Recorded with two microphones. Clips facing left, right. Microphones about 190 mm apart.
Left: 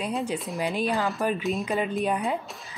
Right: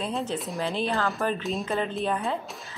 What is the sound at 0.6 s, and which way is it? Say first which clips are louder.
Speech: left 1 dB; 15° left (ahead or behind).